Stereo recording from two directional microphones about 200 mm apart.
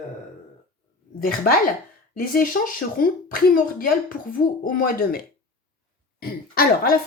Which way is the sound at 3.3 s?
45° left (ahead or behind).